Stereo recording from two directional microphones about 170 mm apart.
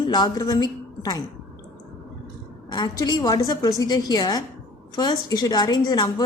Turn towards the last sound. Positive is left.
turn(degrees=25)  # may be behind; listen again after turning